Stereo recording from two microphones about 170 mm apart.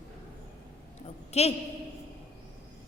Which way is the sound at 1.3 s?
40° left (ahead or behind).